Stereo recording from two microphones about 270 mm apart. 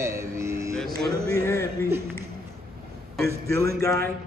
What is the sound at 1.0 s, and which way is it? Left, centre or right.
Music, right.